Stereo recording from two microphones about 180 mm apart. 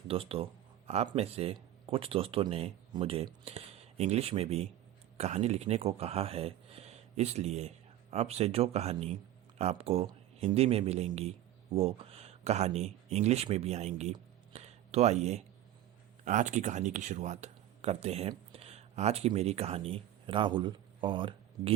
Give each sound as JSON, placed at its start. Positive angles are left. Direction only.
{"t": 0.1, "sound": "speech", "side_deg": -30}
{"t": 14.5, "sound": "a sound", "side_deg": -35}
{"t": 16.2, "sound": "speech", "side_deg": -45}